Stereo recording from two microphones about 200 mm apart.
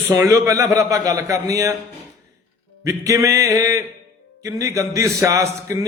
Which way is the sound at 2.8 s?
15° right (ahead or behind).